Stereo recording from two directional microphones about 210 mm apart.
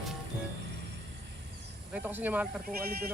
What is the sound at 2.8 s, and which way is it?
Speech, 45° right (ahead or behind).